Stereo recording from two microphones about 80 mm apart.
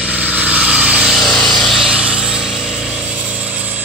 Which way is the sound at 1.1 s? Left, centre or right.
Centre.